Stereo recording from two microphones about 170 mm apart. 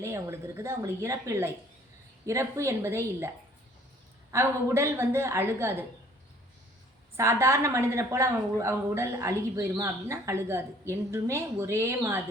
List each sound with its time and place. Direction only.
0.0 s a woman's voice: 15° right (ahead or behind)
4.3 s a woman's voice: 15° right (ahead or behind)
7.2 s a woman's voice: 15° right (ahead or behind)